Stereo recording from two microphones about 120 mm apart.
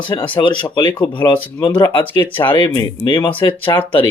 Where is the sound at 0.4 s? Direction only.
40° left (ahead or behind).